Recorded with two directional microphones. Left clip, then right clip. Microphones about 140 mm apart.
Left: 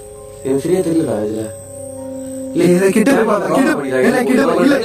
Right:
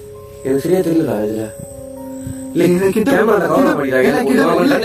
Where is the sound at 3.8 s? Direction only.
10° right (ahead or behind).